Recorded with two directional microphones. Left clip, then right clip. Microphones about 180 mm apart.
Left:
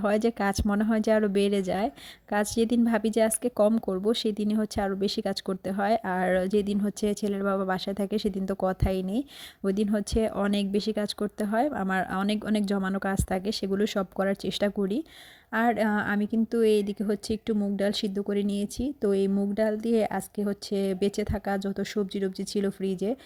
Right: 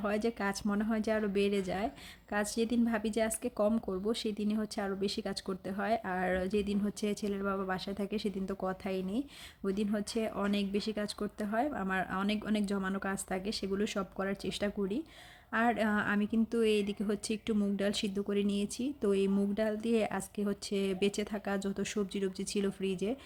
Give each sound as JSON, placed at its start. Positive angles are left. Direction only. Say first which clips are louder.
{"t": 0.0, "sound": "speech", "louder": "left 8 dB", "side_deg": 40}